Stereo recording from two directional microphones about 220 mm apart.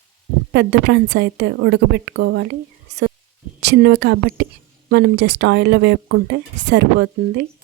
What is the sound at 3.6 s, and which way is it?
Speech, 50° right (ahead or behind).